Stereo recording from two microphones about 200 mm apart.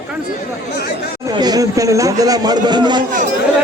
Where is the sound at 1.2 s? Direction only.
20° right (ahead or behind).